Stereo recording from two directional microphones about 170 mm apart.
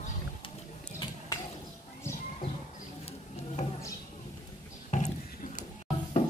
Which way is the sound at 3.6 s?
45° left (ahead or behind).